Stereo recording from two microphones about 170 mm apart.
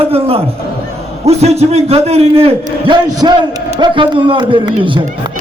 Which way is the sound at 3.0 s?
25° right (ahead or behind).